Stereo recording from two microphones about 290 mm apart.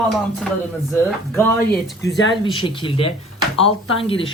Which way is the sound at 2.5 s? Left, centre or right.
Centre.